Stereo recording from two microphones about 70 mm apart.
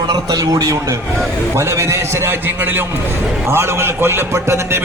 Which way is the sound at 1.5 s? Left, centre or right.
Right.